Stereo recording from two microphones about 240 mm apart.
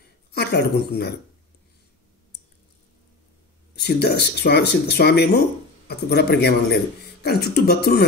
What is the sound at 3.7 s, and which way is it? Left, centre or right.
A man's voice, left.